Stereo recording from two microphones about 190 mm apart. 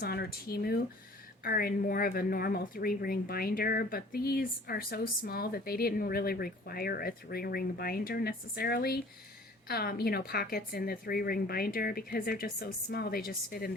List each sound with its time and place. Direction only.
0.0 s speech: 55° left (ahead or behind)